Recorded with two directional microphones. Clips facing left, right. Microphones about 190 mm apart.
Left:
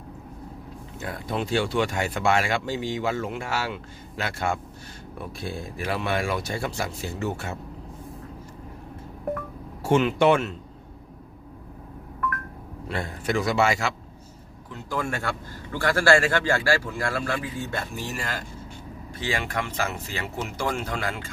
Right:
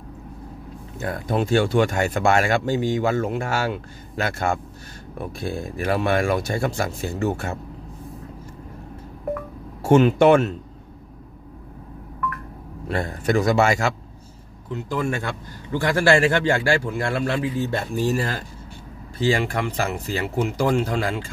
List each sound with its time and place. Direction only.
1.0 s speech: 50° right (ahead or behind)
9.8 s speech: 45° right (ahead or behind)
12.8 s speech: 45° right (ahead or behind)
14.7 s a man's voice: 20° right (ahead or behind)